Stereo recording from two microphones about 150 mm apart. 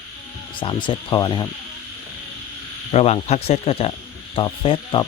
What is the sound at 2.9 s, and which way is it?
Speech, 45° left (ahead or behind).